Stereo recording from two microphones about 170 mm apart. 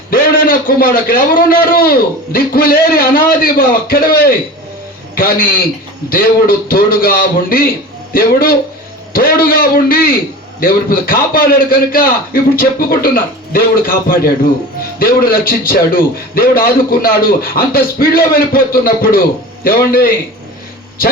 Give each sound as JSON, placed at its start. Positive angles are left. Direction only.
{"t": 0.1, "sound": "a man's voice", "side_deg": 60}
{"t": 6.7, "sound": "a man's voice", "side_deg": 60}